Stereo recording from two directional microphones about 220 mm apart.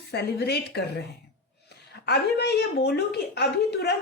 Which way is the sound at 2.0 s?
50° left (ahead or behind).